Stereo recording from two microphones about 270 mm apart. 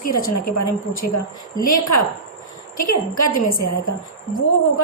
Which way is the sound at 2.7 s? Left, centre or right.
Left.